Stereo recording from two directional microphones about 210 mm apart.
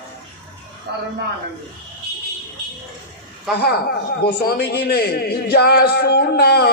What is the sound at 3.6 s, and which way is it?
A man's voice, 50° left (ahead or behind).